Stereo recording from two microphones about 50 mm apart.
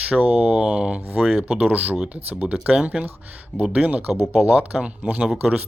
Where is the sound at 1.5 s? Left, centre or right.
Right.